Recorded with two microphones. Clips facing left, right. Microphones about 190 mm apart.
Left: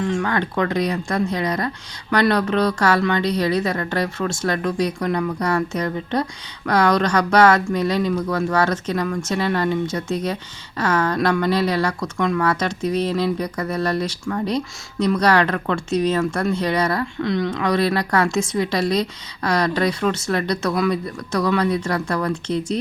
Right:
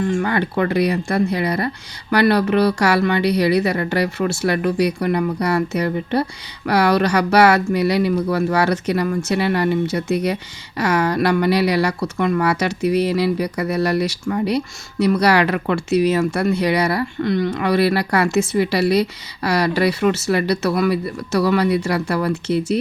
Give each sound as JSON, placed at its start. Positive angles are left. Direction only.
{"t": 0.1, "sound": "speech", "side_deg": -10}